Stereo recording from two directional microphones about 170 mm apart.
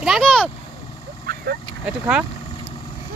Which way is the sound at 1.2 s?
65° right (ahead or behind).